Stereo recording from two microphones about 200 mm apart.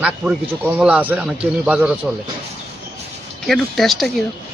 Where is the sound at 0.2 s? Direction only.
Centre (ahead or behind).